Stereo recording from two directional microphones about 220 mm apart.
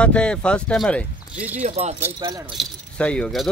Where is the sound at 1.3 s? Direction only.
5° right (ahead or behind).